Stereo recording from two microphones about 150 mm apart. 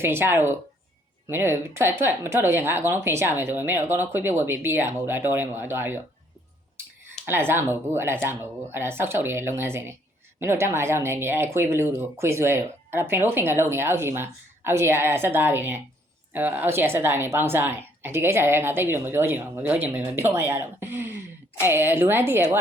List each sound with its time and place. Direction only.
0.0 s a woman's voice: 15° right (ahead or behind)
7.3 s a woman's voice: 15° right (ahead or behind)